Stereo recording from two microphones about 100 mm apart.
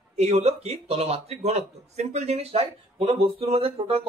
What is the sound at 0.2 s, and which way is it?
Speech, 90° right.